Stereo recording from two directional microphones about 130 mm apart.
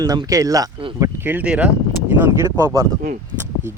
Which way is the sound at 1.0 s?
15° right (ahead or behind).